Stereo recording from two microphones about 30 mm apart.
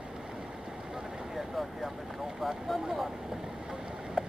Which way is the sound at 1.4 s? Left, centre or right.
Centre.